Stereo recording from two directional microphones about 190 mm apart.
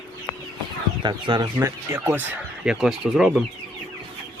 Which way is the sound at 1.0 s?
20° right (ahead or behind).